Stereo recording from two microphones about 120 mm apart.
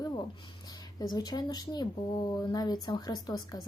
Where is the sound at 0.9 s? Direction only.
35° left (ahead or behind).